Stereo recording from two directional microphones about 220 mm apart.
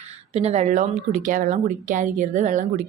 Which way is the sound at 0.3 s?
30° right (ahead or behind).